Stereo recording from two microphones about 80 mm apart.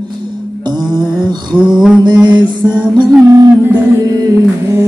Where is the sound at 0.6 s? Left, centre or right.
Right.